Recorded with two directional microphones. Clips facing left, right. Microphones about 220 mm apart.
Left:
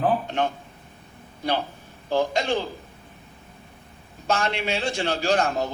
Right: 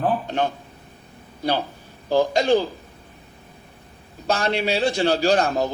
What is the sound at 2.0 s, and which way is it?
Speech, 35° right (ahead or behind).